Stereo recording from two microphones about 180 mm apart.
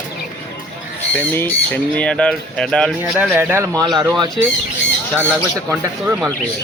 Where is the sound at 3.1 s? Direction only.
10° right (ahead or behind).